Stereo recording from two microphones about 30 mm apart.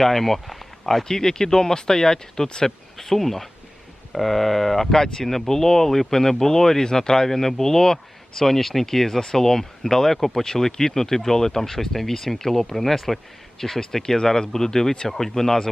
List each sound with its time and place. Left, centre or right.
0.0 s speech: centre
1.0 s speech: left
2.6 s speech: centre